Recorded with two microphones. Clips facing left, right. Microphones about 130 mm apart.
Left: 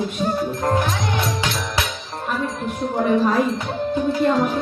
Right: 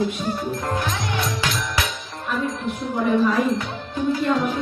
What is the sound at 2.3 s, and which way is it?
Music, 45° left (ahead or behind).